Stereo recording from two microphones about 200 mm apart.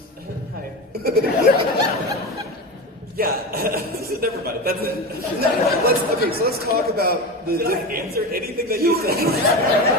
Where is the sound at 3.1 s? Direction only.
50° right (ahead or behind).